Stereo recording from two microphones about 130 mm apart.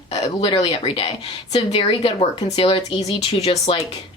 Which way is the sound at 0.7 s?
45° left (ahead or behind).